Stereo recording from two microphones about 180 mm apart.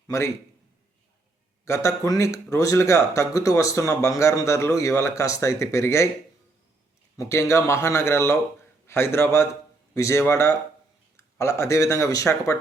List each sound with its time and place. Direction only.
1.6 s speech: 15° left (ahead or behind)
7.2 s speech: 15° left (ahead or behind)